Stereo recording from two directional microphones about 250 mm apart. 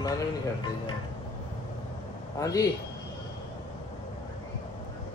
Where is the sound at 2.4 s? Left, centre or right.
Centre.